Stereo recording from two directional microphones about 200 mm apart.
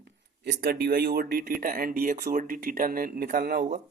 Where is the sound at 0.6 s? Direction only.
50° right (ahead or behind).